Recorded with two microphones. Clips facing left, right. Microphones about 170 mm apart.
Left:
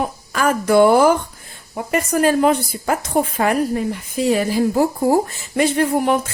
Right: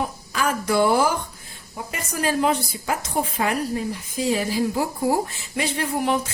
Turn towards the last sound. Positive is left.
turn(degrees=50)  # may be behind; listen again after turning